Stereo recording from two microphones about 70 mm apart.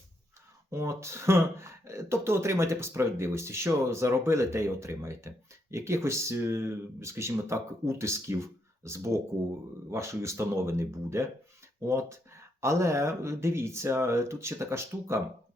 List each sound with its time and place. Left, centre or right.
0.7 s speech: right